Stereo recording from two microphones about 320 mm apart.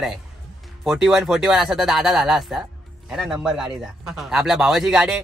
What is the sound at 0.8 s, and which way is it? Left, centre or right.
Speech, centre.